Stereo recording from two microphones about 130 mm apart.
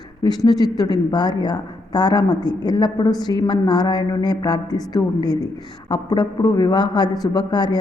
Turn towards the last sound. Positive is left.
turn(degrees=35)  # may be behind; listen again after turning